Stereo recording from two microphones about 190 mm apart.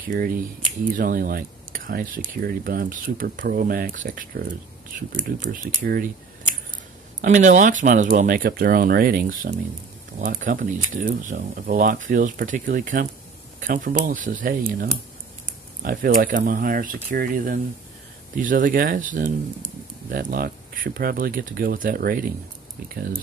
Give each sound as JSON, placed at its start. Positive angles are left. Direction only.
{"t": 0.0, "sound": "speech", "side_deg": -45}